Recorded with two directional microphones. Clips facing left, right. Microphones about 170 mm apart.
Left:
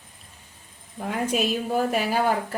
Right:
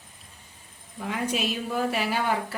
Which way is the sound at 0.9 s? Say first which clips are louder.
Left 3 dB; 45° left (ahead or behind).